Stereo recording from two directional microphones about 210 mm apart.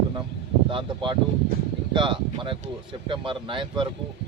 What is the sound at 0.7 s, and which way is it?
Speech, 25° right (ahead or behind).